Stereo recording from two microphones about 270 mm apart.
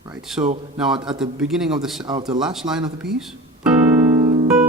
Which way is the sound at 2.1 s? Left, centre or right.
Centre.